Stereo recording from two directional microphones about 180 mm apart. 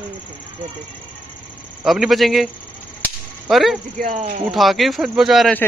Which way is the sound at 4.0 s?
45° right (ahead or behind).